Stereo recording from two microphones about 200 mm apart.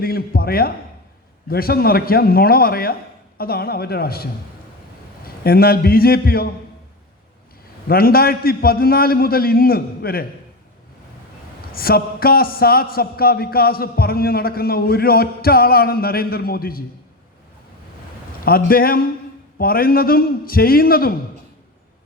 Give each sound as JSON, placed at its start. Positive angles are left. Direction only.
{"t": 0.0, "sound": "a man's voice", "side_deg": 50}
{"t": 7.9, "sound": "a man's voice", "side_deg": 50}
{"t": 11.7, "sound": "a man's voice", "side_deg": 50}
{"t": 18.4, "sound": "a man's voice", "side_deg": 45}